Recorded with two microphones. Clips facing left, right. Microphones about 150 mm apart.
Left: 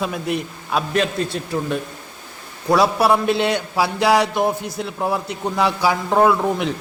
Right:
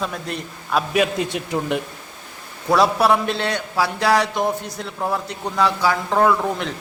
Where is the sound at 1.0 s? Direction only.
15° right (ahead or behind).